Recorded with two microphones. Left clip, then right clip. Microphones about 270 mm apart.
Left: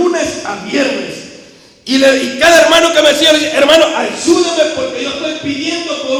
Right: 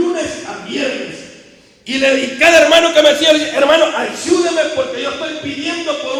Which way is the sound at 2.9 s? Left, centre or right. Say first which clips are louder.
Left 1 dB; centre.